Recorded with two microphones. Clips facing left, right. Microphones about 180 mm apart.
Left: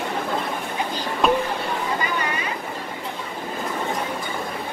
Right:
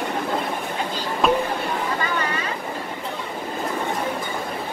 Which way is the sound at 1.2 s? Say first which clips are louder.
Even; centre (ahead or behind).